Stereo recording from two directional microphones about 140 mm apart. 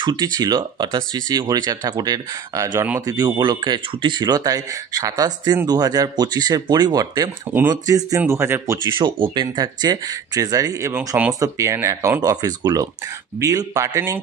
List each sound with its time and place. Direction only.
0.0 s speech: 30° right (ahead or behind)
8.2 s speech: 15° right (ahead or behind)
8.8 s speech: 35° right (ahead or behind)